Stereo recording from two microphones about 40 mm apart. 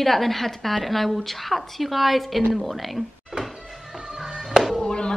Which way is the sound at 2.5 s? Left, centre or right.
Centre.